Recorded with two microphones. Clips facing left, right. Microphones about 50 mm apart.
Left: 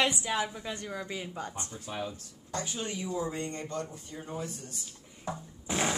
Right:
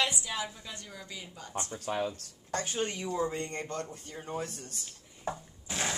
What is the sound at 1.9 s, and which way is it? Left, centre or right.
A man's voice, right.